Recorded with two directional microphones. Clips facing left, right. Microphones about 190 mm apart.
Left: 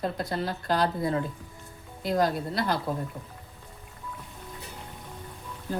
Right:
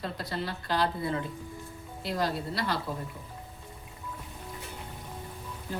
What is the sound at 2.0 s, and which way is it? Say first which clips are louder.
Speech: left 5 dB; 45° left (ahead or behind).